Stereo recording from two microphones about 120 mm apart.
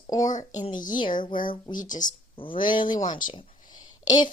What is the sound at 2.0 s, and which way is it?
Speech, 45° left (ahead or behind).